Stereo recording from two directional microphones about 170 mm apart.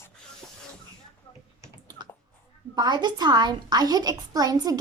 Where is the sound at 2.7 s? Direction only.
25° right (ahead or behind).